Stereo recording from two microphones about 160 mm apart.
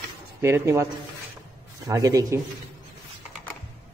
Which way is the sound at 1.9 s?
20° right (ahead or behind).